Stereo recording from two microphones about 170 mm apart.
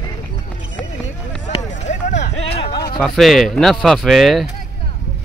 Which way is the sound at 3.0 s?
Centre (ahead or behind).